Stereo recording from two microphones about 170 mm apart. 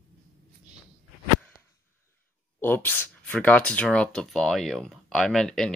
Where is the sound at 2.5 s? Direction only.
10° left (ahead or behind).